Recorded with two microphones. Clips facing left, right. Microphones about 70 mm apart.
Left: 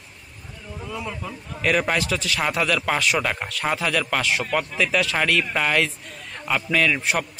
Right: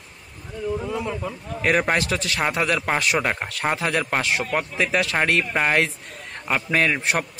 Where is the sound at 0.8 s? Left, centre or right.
Right.